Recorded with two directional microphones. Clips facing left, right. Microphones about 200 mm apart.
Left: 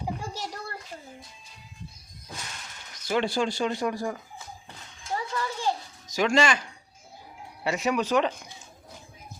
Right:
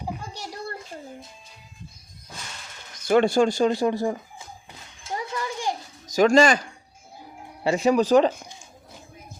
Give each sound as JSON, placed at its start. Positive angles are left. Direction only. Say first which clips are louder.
{"t": 3.1, "sound": "speech", "louder": "right 8 dB", "side_deg": -50}
{"t": 5.4, "sound": "a sound", "louder": "even", "side_deg": -15}
{"t": 6.1, "sound": "speech", "louder": "right 6 dB", "side_deg": -40}